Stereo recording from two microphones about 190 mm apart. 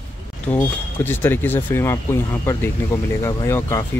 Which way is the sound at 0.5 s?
10° left (ahead or behind).